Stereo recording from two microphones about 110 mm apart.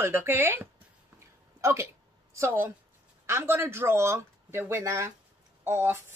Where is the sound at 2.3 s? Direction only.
25° right (ahead or behind).